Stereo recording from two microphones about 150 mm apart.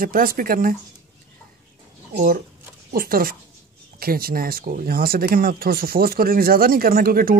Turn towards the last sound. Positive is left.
turn(degrees=-80)